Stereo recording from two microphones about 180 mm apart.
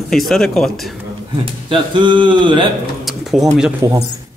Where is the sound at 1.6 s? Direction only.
25° right (ahead or behind).